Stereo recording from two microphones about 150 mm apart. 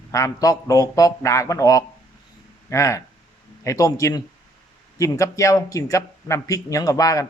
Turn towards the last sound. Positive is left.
turn(degrees=25)  # may be behind; listen again after turning